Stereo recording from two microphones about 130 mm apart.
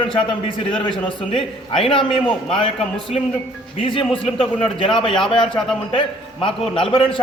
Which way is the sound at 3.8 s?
40° left (ahead or behind).